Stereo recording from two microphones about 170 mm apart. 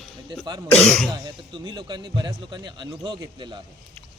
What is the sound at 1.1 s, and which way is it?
A man's voice, 25° right (ahead or behind).